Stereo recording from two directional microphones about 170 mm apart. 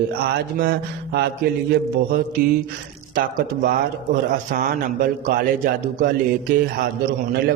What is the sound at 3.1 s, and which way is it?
A man's voice, 55° right (ahead or behind).